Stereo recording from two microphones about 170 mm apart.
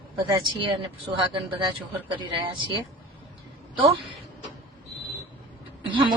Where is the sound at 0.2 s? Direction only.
30° right (ahead or behind).